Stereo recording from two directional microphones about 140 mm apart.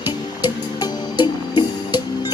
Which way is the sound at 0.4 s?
30° left (ahead or behind).